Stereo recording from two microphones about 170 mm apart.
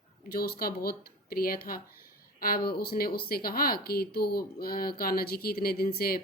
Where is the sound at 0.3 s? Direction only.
65° left (ahead or behind).